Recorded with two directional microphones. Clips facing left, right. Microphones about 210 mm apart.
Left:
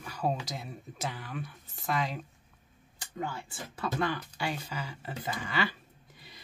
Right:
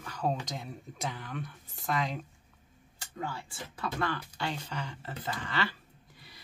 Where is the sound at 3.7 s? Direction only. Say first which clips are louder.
Left 2 dB; 15° left (ahead or behind).